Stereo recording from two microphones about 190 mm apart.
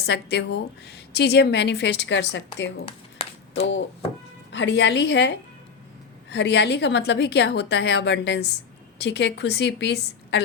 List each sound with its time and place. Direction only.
0.0 s a woman's voice: 60° left (ahead or behind)
3.2 s a sound: 30° left (ahead or behind)
4.5 s a woman's voice: 70° left (ahead or behind)